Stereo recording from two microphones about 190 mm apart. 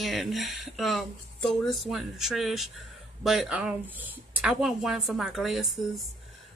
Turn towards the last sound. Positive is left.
turn(degrees=0)  # may be behind; listen again after turning